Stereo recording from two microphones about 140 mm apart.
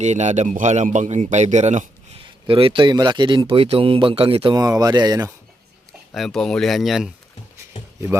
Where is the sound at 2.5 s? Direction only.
40° right (ahead or behind).